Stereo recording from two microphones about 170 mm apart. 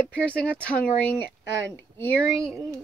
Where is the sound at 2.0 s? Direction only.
5° left (ahead or behind).